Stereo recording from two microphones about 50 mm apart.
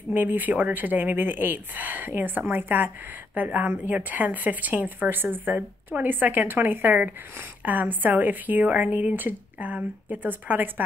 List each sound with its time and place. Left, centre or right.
0.1 s a woman's voice: right